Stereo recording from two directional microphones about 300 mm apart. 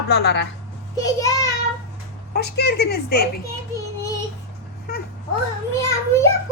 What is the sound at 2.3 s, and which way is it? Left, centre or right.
Speech, left.